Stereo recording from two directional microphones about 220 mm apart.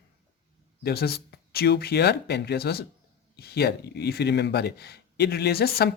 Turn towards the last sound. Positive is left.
turn(degrees=45)  # may be behind; listen again after turning